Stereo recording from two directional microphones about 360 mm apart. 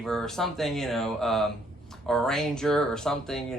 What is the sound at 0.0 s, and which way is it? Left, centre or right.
Speech, centre.